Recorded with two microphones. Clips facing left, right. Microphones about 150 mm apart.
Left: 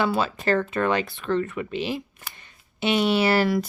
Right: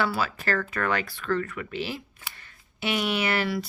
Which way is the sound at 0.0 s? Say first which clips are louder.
Left 4 dB; 20° left (ahead or behind).